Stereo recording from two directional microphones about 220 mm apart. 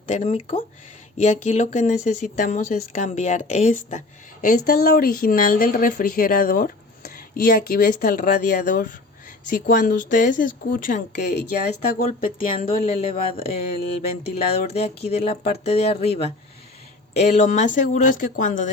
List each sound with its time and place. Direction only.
0.1 s speech: 30° left (ahead or behind)
13.0 s speech: 25° left (ahead or behind)